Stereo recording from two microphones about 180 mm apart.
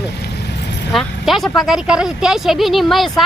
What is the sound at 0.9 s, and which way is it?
Speech, centre (ahead or behind).